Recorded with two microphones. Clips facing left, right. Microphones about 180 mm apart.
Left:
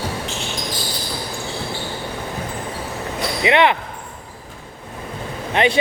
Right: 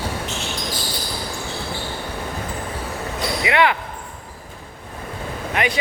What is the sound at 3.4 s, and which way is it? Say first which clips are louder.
Basketball bounce: left 3 dB; 20° left (ahead or behind).